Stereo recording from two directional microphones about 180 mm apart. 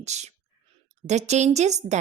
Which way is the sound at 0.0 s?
40° right (ahead or behind).